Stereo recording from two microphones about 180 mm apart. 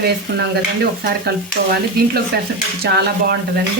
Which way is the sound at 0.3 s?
65° right (ahead or behind).